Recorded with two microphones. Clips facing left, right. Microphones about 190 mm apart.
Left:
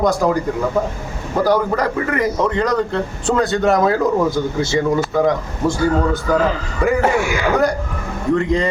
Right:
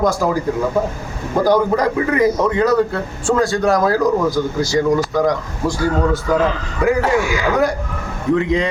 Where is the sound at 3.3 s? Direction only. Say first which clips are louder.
Right 1 dB; 5° left (ahead or behind).